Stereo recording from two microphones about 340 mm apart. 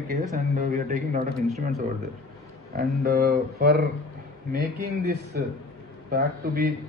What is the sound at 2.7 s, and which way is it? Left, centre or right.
Speech, right.